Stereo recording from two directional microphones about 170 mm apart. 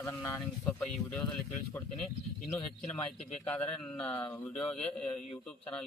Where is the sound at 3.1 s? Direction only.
40° left (ahead or behind).